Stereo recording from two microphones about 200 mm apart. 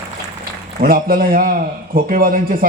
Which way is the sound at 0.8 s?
45° right (ahead or behind).